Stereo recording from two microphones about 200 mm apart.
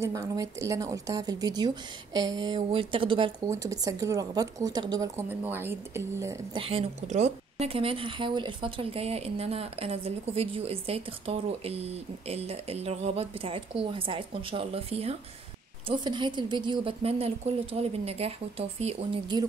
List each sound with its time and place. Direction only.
0.0 s speech: 15° right (ahead or behind)
6.6 s speech: 30° right (ahead or behind)